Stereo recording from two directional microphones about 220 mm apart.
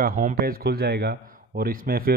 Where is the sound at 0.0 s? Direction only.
35° right (ahead or behind).